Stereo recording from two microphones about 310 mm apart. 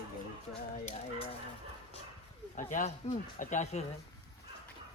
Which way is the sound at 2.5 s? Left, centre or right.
Left.